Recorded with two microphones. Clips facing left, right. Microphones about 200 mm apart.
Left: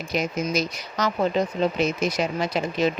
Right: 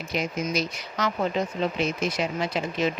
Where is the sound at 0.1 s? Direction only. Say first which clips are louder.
Left 3 dB; 40° left (ahead or behind).